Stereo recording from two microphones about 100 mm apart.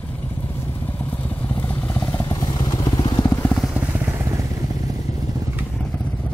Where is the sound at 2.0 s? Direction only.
30° left (ahead or behind); by 3.2 s 50° left (ahead or behind).